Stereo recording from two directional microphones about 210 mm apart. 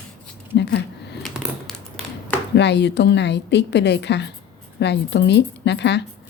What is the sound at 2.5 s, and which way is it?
A woman's voice, 55° left (ahead or behind).